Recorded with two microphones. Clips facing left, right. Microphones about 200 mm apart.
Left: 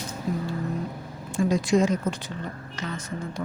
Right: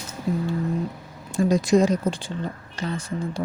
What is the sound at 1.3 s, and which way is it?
Speech, 40° right (ahead or behind).